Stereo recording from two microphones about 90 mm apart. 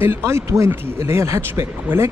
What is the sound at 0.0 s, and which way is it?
Speech, 30° right (ahead or behind).